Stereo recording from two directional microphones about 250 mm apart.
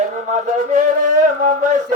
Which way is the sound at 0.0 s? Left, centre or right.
Right.